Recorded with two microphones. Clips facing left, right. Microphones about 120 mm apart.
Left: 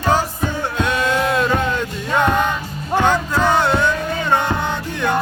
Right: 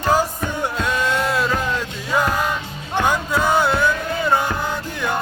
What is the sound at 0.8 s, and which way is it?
Music, centre (ahead or behind).